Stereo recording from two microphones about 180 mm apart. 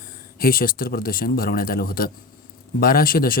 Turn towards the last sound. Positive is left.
turn(degrees=55)  # may be behind; listen again after turning